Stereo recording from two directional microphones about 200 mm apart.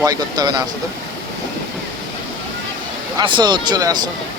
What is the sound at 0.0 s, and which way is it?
Speech, 20° right (ahead or behind).